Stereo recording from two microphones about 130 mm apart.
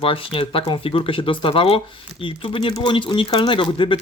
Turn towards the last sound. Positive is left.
turn(degrees=40)  # may be behind; listen again after turning